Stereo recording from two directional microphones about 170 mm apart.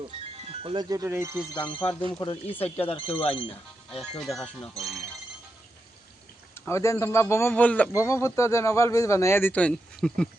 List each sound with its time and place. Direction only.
0.3 s speech: 35° right (ahead or behind); by 1.5 s 15° right (ahead or behind)
1.5 s speech: 30° left (ahead or behind)
2.5 s speech: 10° left (ahead or behind)
2.8 s speech: 35° left (ahead or behind)
4.2 s speech: centre (ahead or behind)
6.5 s a sound: 15° left (ahead or behind)
7.0 s speech: 15° left (ahead or behind)